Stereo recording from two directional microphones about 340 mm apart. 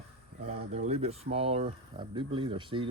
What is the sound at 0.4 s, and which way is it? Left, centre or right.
Speech, centre.